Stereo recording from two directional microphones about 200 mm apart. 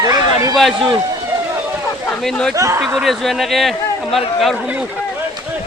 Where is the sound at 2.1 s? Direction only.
5° left (ahead or behind).